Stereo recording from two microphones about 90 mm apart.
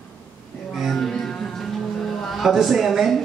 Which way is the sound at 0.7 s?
Centre (ahead or behind).